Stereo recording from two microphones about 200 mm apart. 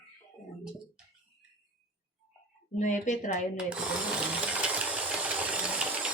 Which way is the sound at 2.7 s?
40° left (ahead or behind).